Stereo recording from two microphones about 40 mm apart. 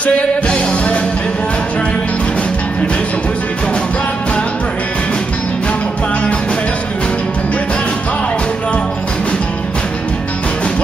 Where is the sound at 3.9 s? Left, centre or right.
Left.